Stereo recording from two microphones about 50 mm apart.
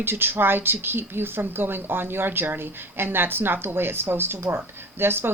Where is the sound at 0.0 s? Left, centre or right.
Right.